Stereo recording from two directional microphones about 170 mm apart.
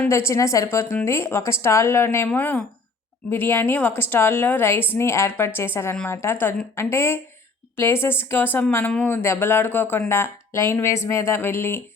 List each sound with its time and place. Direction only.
0.0 s speech: 15° left (ahead or behind)